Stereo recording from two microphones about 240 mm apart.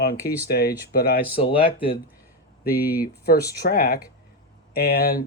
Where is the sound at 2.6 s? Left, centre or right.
Left.